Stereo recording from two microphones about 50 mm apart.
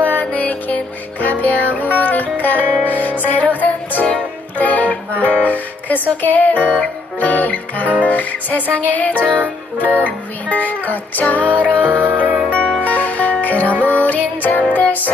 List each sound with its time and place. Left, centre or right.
0.0 s music: left
12.1 s music: right
12.4 s music: left